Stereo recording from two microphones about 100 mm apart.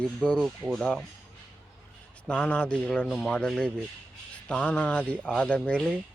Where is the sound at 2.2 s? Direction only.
10° left (ahead or behind).